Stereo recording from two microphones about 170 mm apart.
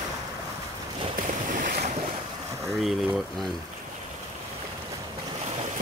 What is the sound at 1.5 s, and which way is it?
Boat, 50° right (ahead or behind).